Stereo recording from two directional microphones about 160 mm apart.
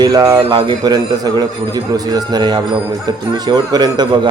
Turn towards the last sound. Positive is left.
turn(degrees=-25)  # may be behind; listen again after turning